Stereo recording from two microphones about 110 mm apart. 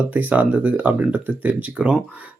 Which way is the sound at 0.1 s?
15° right (ahead or behind).